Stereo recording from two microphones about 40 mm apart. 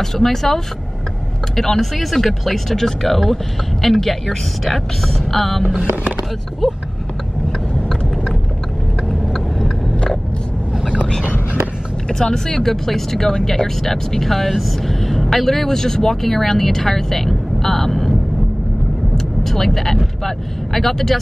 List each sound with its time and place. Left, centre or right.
0.0 s speech: centre
1.6 s a woman's voice: centre
9.1 s a sound: centre
10.9 s a sound: centre
12.1 s speech: centre
13.8 s a woman's voice: centre
19.1 s speech: centre